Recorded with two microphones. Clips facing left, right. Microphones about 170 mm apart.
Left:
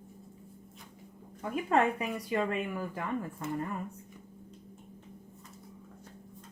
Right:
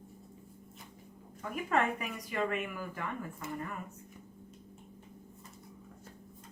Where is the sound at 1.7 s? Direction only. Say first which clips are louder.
Left 4 dB; 30° left (ahead or behind).